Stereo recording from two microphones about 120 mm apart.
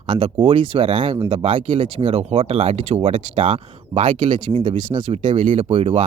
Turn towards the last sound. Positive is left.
turn(degrees=-55)  # may be behind; listen again after turning